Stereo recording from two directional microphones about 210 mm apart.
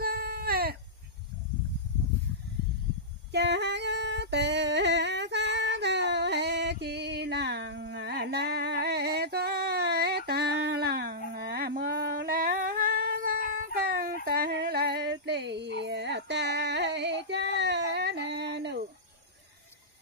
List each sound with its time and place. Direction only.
0.0 s baby cry: 45° right (ahead or behind)
3.3 s singing: 55° right (ahead or behind)